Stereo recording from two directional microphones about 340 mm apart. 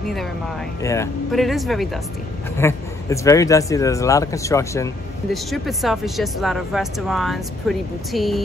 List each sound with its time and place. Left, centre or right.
0.8 s speech: centre